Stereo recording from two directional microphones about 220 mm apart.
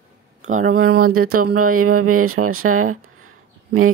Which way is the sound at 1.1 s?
80° right.